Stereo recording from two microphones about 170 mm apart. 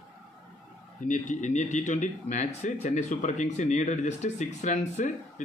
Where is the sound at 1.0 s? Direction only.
50° left (ahead or behind).